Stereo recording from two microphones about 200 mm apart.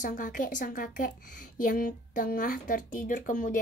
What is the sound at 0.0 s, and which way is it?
A woman's voice, 40° left (ahead or behind).